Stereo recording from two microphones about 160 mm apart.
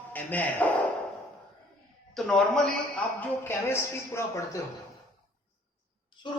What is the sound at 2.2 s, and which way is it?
A man's voice, centre (ahead or behind).